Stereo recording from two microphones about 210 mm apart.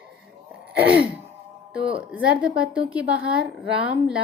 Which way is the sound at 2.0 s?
5° right (ahead or behind).